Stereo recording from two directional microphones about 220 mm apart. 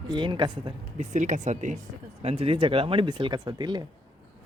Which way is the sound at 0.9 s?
35° right (ahead or behind).